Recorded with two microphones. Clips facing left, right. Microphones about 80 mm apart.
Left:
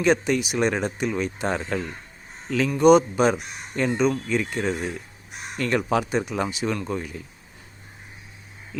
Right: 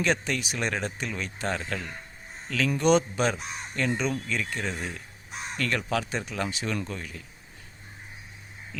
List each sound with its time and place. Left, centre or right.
0.0 s speech: centre
4.7 s speech: centre
5.5 s speech: left
8.7 s speech: centre